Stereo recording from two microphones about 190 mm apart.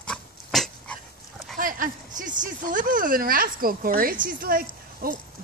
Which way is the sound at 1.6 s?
45° right (ahead or behind).